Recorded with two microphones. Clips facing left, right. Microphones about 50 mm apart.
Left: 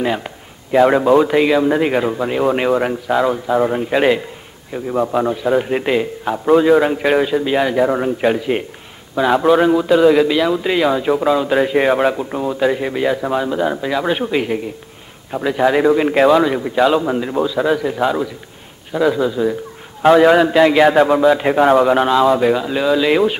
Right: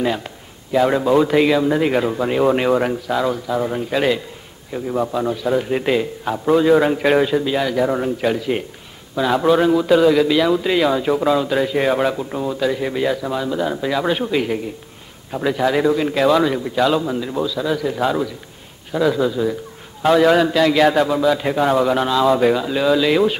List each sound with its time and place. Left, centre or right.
0.7 s a man's voice: left
4.7 s a man's voice: centre
7.4 s a man's voice: left
11.4 s a man's voice: left
16.3 s a man's voice: centre
17.7 s a man's voice: centre
22.2 s a man's voice: centre